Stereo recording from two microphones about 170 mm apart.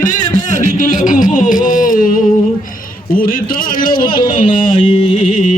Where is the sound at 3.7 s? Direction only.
55° left (ahead or behind).